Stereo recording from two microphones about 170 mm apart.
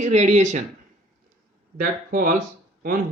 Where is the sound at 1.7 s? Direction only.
55° right (ahead or behind).